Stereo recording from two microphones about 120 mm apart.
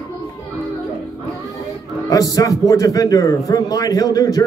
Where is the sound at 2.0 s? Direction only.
30° left (ahead or behind).